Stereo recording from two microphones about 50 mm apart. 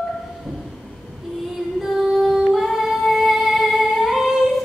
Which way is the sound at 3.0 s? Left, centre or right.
Centre.